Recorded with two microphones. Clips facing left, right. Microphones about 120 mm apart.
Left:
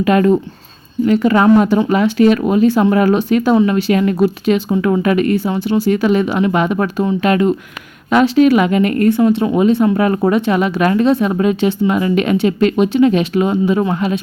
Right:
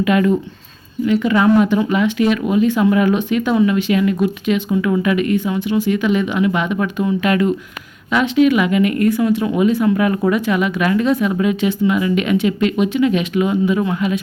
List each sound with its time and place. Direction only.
0.0 s speech: 40° left (ahead or behind)
9.1 s speech: 25° left (ahead or behind)